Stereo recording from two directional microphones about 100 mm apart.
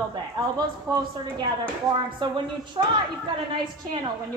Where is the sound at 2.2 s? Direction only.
55° right (ahead or behind).